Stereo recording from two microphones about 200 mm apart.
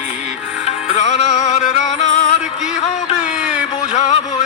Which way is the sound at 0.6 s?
35° left (ahead or behind).